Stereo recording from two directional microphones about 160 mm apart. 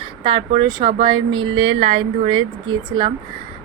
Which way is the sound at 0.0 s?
35° right (ahead or behind).